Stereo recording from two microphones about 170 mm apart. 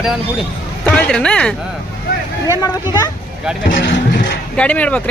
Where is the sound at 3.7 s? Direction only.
90° left.